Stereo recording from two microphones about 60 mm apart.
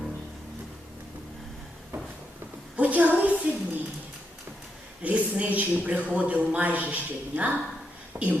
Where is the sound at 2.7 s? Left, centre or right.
Right.